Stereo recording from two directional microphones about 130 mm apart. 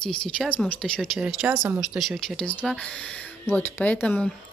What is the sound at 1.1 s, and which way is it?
Speech, 10° right (ahead or behind).